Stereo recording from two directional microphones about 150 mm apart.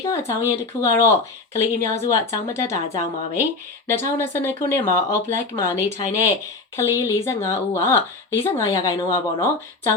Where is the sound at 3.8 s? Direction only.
15° left (ahead or behind).